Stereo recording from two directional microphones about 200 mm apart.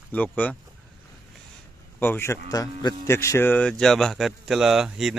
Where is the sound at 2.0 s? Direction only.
10° left (ahead or behind).